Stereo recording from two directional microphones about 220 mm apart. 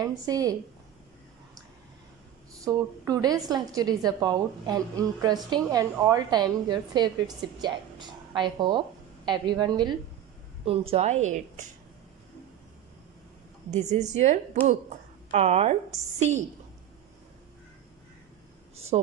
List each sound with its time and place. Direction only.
0.0 s a woman's voice: 15° right (ahead or behind)
2.6 s a woman's voice: 15° right (ahead or behind); by 11.6 s 35° right (ahead or behind)
13.7 s a woman's voice: 30° right (ahead or behind)